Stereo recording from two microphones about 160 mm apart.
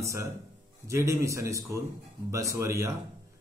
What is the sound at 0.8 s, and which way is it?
A man's voice, 15° right (ahead or behind).